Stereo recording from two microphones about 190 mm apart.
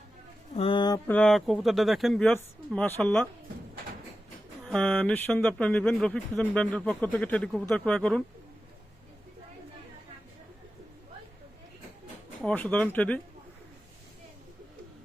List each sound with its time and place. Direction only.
0.5 s mantra: 30° left (ahead or behind)
1.0 s speech: 5° left (ahead or behind)
4.6 s speech: 5° left (ahead or behind)
12.4 s speech: 5° left (ahead or behind)